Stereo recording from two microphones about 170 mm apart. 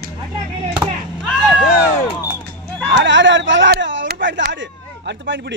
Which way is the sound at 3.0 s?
90° right.